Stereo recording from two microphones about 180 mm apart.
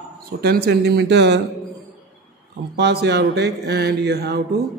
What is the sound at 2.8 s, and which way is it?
A man's voice, 65° right (ahead or behind).